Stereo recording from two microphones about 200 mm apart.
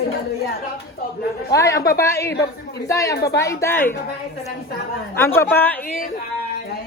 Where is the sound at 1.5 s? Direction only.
15° left (ahead or behind).